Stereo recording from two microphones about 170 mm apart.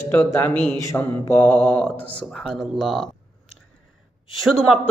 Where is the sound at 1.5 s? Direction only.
5° left (ahead or behind).